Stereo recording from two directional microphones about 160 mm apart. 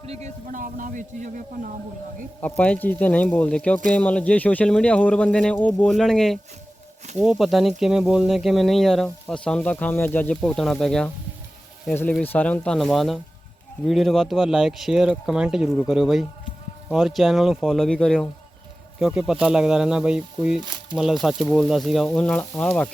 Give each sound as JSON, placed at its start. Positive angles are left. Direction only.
{"t": 0.0, "sound": "a man's voice", "side_deg": -40}
{"t": 0.4, "sound": "speech", "side_deg": -55}
{"t": 2.4, "sound": "speech", "side_deg": 10}